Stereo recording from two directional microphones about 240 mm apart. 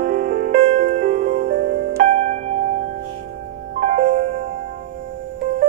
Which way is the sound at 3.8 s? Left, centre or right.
Right.